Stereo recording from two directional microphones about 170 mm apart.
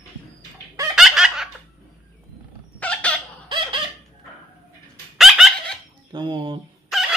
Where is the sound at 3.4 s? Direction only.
30° right (ahead or behind).